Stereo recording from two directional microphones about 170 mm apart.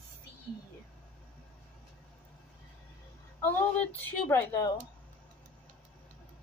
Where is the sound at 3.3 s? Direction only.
10° left (ahead or behind).